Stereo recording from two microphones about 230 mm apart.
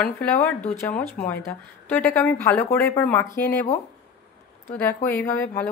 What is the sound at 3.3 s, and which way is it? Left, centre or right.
Speech, left.